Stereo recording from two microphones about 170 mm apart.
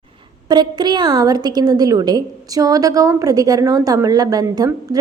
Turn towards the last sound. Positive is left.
turn(degrees=-20)  # may be behind; listen again after turning